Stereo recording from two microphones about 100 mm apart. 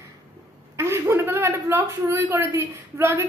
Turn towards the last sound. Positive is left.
turn(degrees=-25)  # may be behind; listen again after turning